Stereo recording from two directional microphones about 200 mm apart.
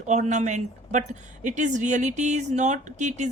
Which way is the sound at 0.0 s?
35° right (ahead or behind).